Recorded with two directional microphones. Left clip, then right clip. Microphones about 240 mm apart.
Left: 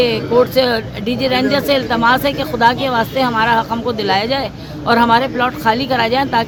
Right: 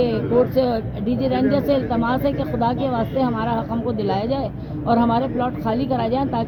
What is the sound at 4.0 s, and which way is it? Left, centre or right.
Speech, centre.